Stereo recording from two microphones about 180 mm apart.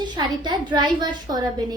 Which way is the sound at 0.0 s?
25° right (ahead or behind).